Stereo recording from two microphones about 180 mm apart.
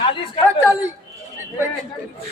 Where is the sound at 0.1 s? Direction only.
25° left (ahead or behind).